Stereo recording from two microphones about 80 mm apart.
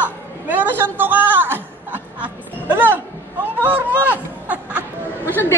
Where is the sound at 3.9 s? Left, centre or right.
Right.